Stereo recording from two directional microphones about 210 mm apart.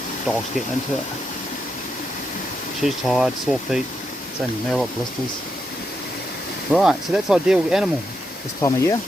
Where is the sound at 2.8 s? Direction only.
Centre (ahead or behind).